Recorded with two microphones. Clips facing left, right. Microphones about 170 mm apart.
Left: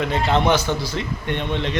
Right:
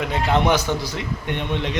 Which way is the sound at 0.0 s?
10° right (ahead or behind).